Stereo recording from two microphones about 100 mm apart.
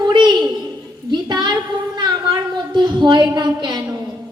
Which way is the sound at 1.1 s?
50° right (ahead or behind).